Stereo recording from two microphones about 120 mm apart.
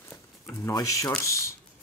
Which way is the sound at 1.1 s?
25° left (ahead or behind).